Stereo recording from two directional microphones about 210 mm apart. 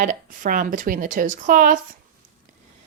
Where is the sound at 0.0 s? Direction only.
40° right (ahead or behind).